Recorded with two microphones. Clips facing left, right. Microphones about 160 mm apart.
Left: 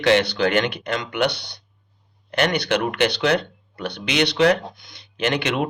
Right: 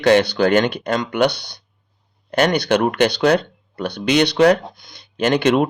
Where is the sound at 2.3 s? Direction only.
40° right (ahead or behind).